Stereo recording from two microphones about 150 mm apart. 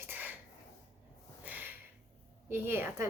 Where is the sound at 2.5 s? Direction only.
15° right (ahead or behind).